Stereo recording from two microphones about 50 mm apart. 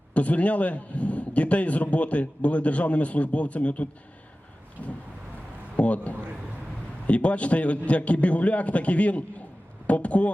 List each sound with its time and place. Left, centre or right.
0.1 s a man's voice: left
4.8 s vehicle: left
5.7 s a man's voice: left